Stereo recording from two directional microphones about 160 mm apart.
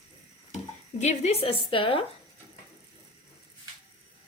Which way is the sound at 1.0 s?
45° left (ahead or behind).